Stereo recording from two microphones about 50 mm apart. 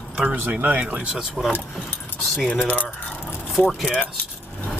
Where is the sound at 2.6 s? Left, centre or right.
Left.